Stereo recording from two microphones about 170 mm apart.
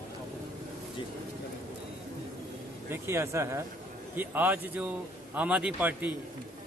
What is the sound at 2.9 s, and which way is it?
A man's voice, 15° right (ahead or behind).